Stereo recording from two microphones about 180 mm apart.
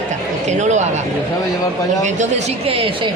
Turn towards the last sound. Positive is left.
turn(degrees=-30)  # may be behind; listen again after turning